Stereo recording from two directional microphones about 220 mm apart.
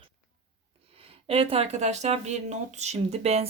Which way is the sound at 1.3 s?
25° right (ahead or behind).